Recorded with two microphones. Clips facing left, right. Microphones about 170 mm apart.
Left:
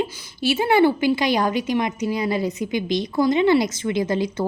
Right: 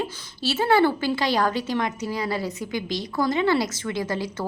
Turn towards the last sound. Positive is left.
turn(degrees=20)  # may be behind; listen again after turning